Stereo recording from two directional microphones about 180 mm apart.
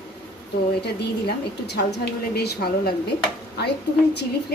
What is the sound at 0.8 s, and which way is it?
A woman's voice, 65° left (ahead or behind).